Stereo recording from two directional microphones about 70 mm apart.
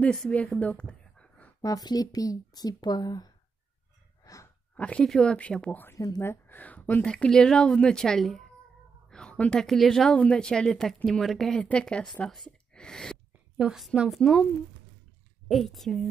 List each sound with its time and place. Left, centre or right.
0.0 s a woman's voice: centre
0.4 s a sound: left
1.6 s speech: left
4.2 s sigh: left
4.7 s speech: centre
5.0 s a woman's voice: centre
5.9 s speech: left
6.2 s a woman's voice: left; by 8.5 s centre
9.1 s a woman's voice: centre
11.6 s a woman's voice: centre
12.4 s a sound: centre
13.6 s a woman's voice: centre
15.4 s a woman's voice: centre